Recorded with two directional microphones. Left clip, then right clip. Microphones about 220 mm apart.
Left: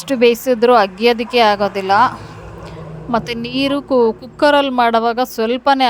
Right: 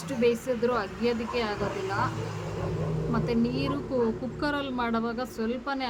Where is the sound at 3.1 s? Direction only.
45° left (ahead or behind).